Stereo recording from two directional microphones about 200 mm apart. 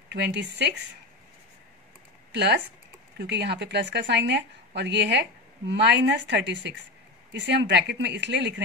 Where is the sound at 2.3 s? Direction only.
60° right (ahead or behind).